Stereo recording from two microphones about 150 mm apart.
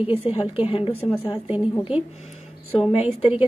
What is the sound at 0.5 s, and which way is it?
Speech, 40° left (ahead or behind).